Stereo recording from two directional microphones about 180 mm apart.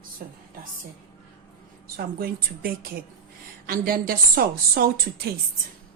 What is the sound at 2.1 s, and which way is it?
A woman's voice, 55° right (ahead or behind).